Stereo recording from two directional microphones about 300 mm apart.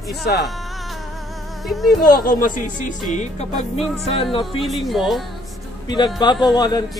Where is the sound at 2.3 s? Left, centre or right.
Left.